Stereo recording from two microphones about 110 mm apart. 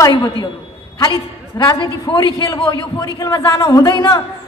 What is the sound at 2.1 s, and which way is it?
Speech, 50° left (ahead or behind).